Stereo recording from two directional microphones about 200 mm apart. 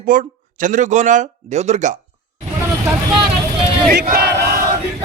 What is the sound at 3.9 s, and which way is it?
Battle cry, 55° right (ahead or behind).